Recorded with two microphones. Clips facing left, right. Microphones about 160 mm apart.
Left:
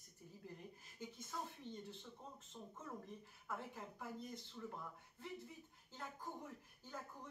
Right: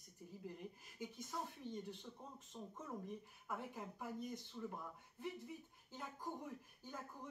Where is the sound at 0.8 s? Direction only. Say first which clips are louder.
Right 3 dB; 15° right (ahead or behind).